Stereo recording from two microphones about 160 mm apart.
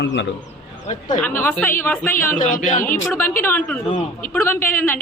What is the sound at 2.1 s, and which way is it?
Speech, 55° left (ahead or behind).